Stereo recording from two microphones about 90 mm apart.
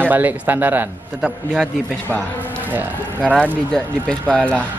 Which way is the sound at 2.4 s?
20° right (ahead or behind).